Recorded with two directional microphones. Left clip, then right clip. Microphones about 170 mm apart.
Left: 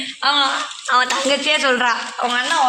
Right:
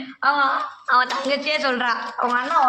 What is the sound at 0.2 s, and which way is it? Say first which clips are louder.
Speech: left 2 dB; 10° left (ahead or behind).